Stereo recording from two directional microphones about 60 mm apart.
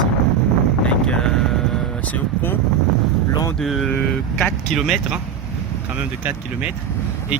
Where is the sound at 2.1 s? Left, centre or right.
Left.